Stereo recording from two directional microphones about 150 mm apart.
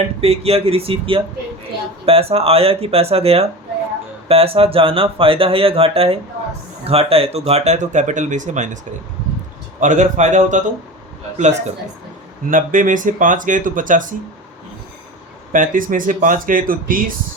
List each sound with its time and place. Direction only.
0.2 s speech: 40° right (ahead or behind)
9.8 s speech: 55° right (ahead or behind)
15.5 s speech: 65° right (ahead or behind)